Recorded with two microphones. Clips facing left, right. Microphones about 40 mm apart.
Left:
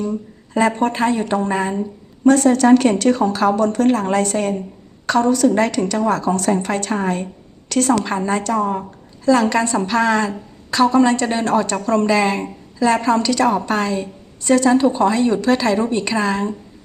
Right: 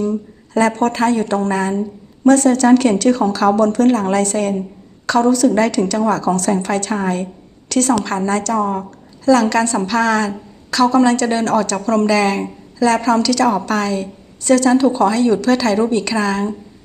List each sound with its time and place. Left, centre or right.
0.0 s a woman's voice: centre
8.5 s speech: centre
8.8 s a woman's voice: left